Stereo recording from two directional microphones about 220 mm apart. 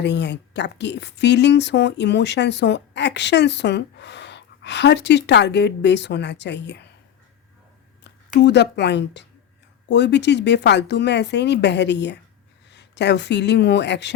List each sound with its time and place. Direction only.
0.0 s speech: 50° left (ahead or behind)
8.0 s a woman's voice: 50° left (ahead or behind)